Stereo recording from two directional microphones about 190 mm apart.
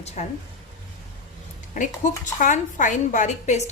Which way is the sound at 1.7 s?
40° left (ahead or behind).